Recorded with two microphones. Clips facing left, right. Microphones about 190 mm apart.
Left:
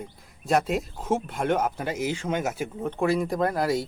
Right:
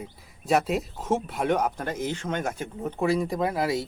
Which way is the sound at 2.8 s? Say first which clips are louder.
Even; centre (ahead or behind).